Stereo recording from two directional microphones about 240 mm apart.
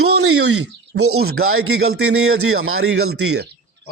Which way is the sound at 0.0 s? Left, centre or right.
Right.